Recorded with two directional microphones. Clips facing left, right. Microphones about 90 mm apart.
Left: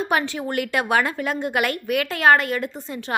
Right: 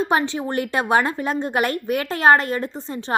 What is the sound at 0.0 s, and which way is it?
A woman's voice, 25° right (ahead or behind).